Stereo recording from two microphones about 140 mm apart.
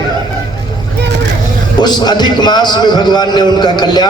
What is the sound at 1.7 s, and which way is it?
A man's voice, 30° left (ahead or behind).